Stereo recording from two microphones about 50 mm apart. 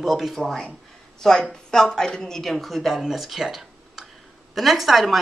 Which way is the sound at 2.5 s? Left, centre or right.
Centre.